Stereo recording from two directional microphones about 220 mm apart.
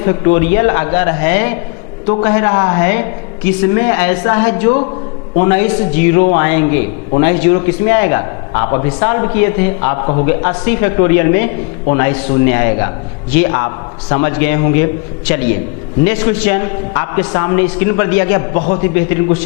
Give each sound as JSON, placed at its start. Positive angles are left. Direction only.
{"t": 0.0, "sound": "a man's voice", "side_deg": 15}
{"t": 16.0, "sound": "a man's voice", "side_deg": 10}